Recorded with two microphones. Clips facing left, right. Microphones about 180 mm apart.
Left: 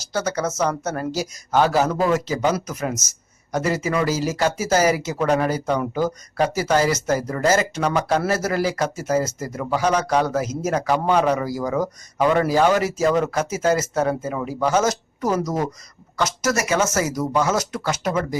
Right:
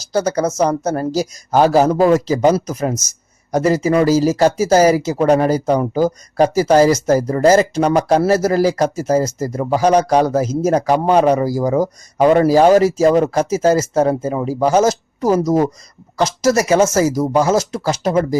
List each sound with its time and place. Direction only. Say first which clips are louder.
0.1 s speech: right 7 dB; 35° right (ahead or behind)